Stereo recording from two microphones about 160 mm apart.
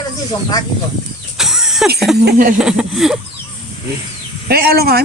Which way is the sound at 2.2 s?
60° right (ahead or behind).